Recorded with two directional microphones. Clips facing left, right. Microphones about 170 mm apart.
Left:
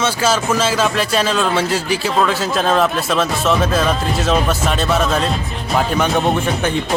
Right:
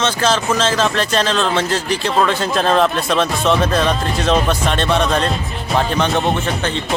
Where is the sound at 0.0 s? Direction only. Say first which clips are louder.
Even; 10° left (ahead or behind).